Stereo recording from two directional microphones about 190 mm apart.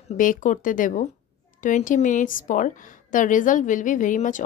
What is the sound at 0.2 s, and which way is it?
A woman's voice, 45° left (ahead or behind).